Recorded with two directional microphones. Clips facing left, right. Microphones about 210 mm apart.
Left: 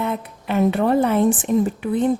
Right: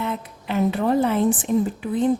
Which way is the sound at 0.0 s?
60° left (ahead or behind).